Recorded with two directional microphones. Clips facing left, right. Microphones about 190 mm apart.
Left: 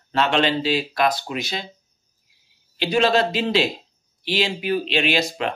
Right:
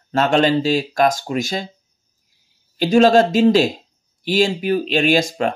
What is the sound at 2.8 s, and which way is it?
Speech, 45° right (ahead or behind).